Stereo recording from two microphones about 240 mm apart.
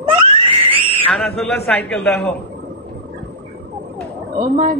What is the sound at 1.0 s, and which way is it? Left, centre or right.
A man's voice, centre.